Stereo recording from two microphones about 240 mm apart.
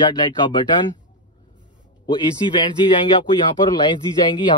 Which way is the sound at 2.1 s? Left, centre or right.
Centre.